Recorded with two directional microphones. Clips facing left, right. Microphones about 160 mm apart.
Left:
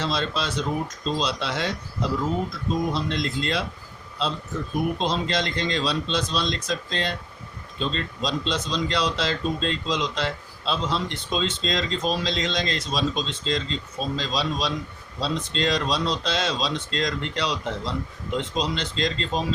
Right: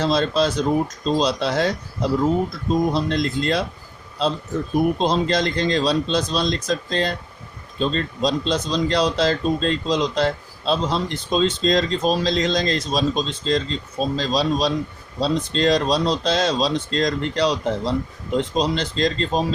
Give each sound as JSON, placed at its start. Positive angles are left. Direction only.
{"t": 0.0, "sound": "speech", "side_deg": -40}